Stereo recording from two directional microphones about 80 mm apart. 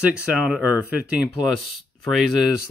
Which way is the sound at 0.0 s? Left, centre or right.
Centre.